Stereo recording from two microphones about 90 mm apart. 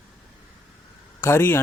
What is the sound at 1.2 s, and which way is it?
Speech, 25° left (ahead or behind).